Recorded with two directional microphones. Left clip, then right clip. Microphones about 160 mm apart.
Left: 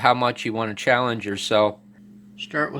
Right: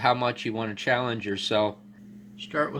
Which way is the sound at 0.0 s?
25° left (ahead or behind).